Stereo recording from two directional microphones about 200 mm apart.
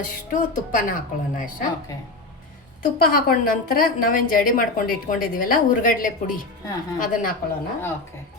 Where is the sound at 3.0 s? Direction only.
45° left (ahead or behind).